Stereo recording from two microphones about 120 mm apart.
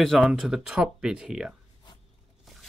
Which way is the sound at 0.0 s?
5° left (ahead or behind).